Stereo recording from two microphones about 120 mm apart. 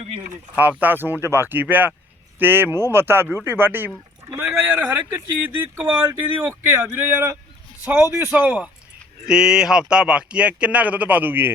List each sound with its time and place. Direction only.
0.5 s speech: 15° right (ahead or behind)